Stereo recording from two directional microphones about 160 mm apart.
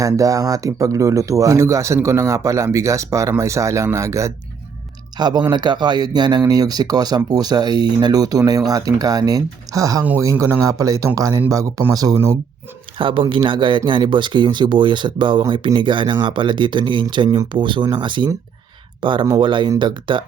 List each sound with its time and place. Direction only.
0.0 s speech: 20° right (ahead or behind)
10.0 s speech: 10° right (ahead or behind)
13.0 s speech: 30° right (ahead or behind)